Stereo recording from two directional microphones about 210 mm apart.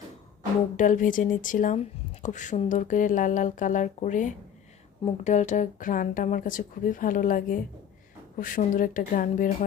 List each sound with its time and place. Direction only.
0.8 s speech: 40° left (ahead or behind)